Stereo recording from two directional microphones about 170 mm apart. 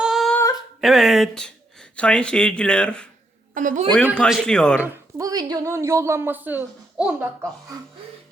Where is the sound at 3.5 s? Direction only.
50° right (ahead or behind).